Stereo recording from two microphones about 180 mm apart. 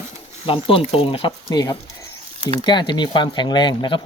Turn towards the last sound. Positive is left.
turn(degrees=25)  # may be behind; listen again after turning